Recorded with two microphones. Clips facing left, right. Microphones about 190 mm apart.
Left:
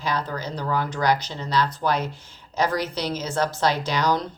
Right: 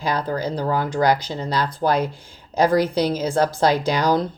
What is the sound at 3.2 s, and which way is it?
Speech, 35° right (ahead or behind).